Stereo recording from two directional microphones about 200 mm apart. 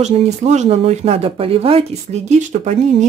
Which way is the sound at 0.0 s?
35° right (ahead or behind).